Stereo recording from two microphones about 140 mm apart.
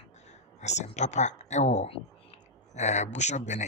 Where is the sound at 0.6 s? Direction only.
55° left (ahead or behind).